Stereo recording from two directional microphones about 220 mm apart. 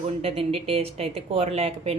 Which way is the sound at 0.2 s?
25° right (ahead or behind).